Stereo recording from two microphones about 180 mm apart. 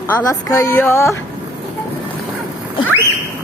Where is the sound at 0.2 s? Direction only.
20° left (ahead or behind).